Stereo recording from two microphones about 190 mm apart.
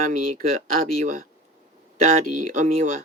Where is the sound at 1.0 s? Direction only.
40° right (ahead or behind).